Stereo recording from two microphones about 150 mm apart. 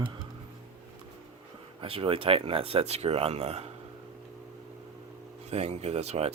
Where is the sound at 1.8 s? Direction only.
40° right (ahead or behind).